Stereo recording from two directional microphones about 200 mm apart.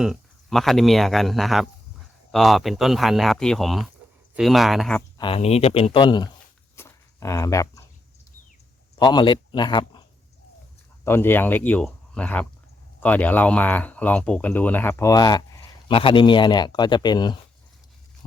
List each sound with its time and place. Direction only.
0.0 s speech: centre (ahead or behind)
5.1 s speech: 25° left (ahead or behind)
6.7 s a sound: 15° left (ahead or behind)
9.0 s a man's voice: 20° left (ahead or behind)
11.0 s speech: 10° left (ahead or behind)